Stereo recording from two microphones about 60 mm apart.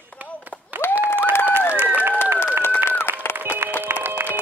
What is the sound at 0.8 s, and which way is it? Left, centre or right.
Applause, left.